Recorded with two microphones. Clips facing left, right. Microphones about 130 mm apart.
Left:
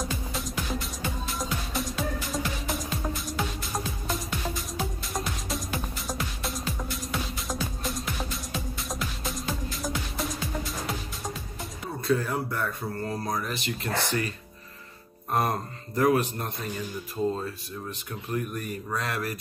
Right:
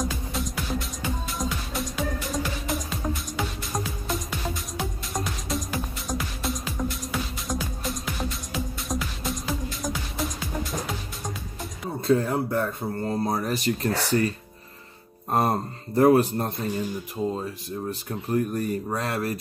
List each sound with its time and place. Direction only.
0.0 s music: centre (ahead or behind)
12.0 s speech: 25° right (ahead or behind)
13.4 s speech: 40° right (ahead or behind)
15.3 s speech: 30° right (ahead or behind)
17.2 s speech: 15° right (ahead or behind)
17.8 s speech: 35° right (ahead or behind)